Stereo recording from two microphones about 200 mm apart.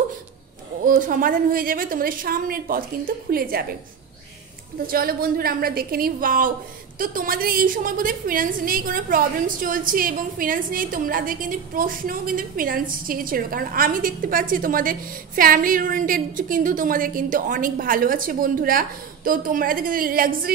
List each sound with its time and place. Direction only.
0.8 s a woman's voice: 40° right (ahead or behind)
4.8 s a woman's voice: 45° right (ahead or behind)